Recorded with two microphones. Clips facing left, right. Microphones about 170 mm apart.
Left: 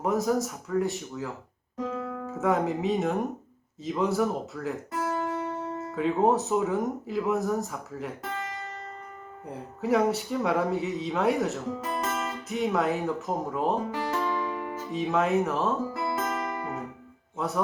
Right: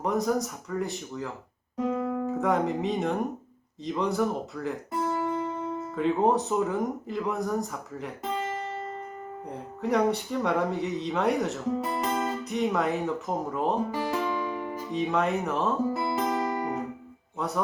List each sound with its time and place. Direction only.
0.0 s speech: centre (ahead or behind)
1.8 s music: 20° right (ahead or behind)
2.3 s speech: centre (ahead or behind)
5.5 s music: 15° right (ahead or behind)
6.0 s speech: centre (ahead or behind)
9.5 s speech: 5° left (ahead or behind)
11.8 s music: 15° right (ahead or behind)
12.5 s speech: centre (ahead or behind)
13.9 s music: 15° right (ahead or behind)
14.8 s speech: centre (ahead or behind)
15.9 s music: 20° right (ahead or behind)
17.3 s speech: centre (ahead or behind)